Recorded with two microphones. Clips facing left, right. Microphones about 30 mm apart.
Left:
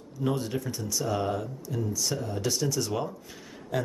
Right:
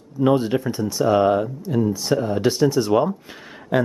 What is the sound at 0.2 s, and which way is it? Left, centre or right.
Speech, right.